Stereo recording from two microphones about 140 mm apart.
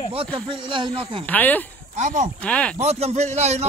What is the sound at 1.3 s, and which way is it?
Speech, 10° left (ahead or behind).